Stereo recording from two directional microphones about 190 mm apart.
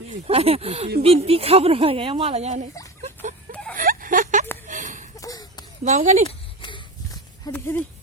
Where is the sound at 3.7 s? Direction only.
45° right (ahead or behind).